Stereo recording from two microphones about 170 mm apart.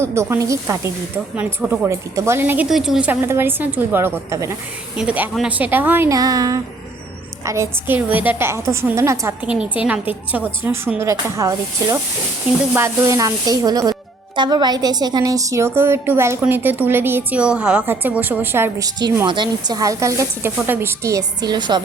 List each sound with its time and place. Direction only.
0.0 s a woman's voice: 15° right (ahead or behind)